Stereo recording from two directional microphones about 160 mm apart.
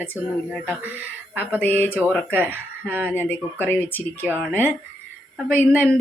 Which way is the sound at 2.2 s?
10° right (ahead or behind).